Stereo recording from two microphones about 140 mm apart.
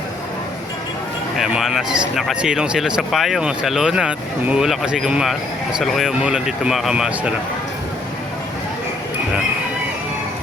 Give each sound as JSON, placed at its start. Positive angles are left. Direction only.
{"t": 1.4, "sound": "speech", "side_deg": -5}